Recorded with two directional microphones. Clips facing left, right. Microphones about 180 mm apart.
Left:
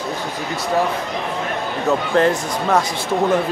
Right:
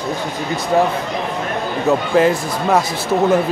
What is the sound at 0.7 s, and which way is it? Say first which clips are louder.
Speech: right 4 dB; 20° right (ahead or behind).